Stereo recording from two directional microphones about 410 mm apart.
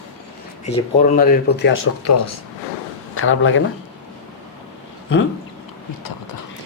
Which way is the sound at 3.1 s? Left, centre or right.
Left.